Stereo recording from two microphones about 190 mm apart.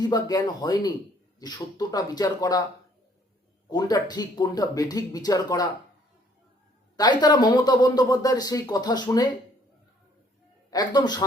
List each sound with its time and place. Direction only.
0.0 s speech: 20° left (ahead or behind)
3.7 s speech: 20° left (ahead or behind)
6.9 s speech: 20° left (ahead or behind)
10.7 s speech: 20° left (ahead or behind)